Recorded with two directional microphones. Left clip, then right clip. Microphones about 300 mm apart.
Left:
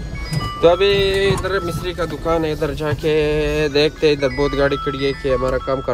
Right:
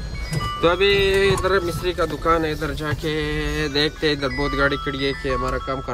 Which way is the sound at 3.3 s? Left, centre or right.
Left.